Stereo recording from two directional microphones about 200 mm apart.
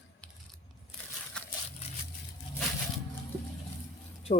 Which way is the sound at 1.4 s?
5° left (ahead or behind).